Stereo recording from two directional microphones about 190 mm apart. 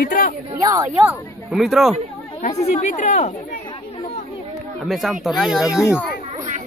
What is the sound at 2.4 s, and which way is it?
Speech, 40° left (ahead or behind).